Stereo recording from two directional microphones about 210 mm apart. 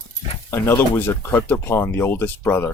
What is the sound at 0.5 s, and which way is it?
Speech, 10° left (ahead or behind).